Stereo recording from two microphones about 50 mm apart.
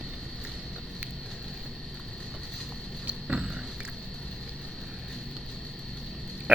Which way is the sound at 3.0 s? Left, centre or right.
Right.